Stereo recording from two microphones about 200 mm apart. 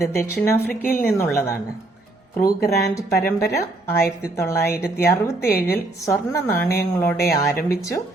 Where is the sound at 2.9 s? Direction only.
15° left (ahead or behind).